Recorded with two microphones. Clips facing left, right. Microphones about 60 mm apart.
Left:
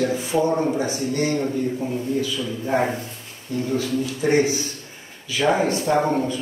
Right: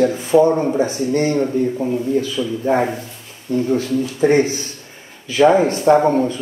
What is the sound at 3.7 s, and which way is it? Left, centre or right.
A man's voice, right.